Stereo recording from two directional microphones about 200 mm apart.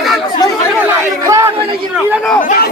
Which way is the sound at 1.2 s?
15° right (ahead or behind).